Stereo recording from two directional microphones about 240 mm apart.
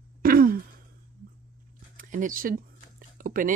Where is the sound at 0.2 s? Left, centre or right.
Right.